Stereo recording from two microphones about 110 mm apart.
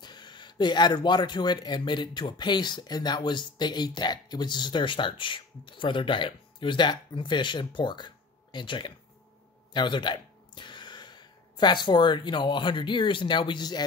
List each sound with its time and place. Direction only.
0.0 s speech: 40° left (ahead or behind)